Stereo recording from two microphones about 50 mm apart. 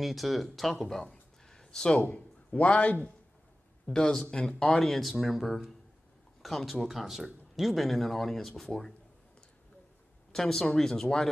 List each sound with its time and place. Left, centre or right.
0.0 s a man's voice: centre; by 3.1 s left
3.9 s speech: centre
4.7 s speech: centre
10.3 s speech: centre